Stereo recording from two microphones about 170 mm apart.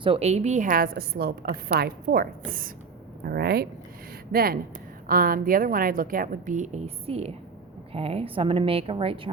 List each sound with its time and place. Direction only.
0.0 s a woman's voice: 35° right (ahead or behind)